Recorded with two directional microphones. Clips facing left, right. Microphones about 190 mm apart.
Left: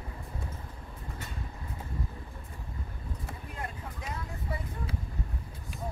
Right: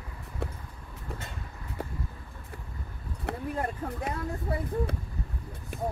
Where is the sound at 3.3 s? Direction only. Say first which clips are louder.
Right 12 dB; 65° right (ahead or behind).